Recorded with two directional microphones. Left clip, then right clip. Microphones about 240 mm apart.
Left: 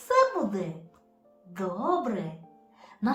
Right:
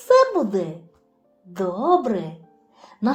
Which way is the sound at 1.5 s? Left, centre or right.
Right.